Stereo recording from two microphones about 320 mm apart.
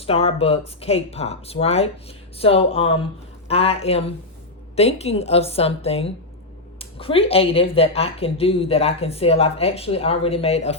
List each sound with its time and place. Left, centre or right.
0.0 s a woman's voice: centre